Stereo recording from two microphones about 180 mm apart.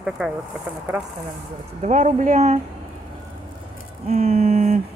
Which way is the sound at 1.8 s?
45° right (ahead or behind).